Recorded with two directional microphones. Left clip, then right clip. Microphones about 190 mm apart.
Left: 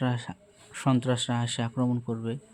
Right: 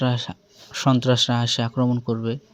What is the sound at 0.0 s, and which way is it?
Speech, 20° right (ahead or behind).